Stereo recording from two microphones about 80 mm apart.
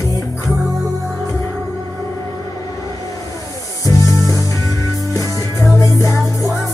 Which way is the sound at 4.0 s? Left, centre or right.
Right.